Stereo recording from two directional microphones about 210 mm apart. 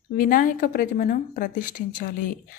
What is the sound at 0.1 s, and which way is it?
A woman's voice, 40° left (ahead or behind).